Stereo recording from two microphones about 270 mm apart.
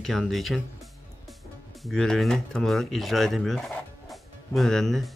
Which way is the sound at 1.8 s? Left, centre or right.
Centre.